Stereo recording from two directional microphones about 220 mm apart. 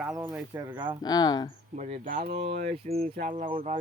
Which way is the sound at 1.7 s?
35° right (ahead or behind).